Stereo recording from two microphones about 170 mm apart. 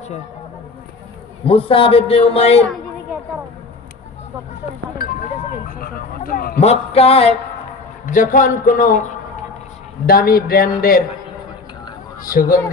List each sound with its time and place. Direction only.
1.4 s a man's voice: 35° left (ahead or behind)
5.7 s speech: 55° left (ahead or behind)
6.6 s a man's voice: 40° left (ahead or behind)
8.0 s a man's voice: 50° left (ahead or behind)
10.0 s speech: 60° left (ahead or behind)
12.2 s speech: 55° left (ahead or behind)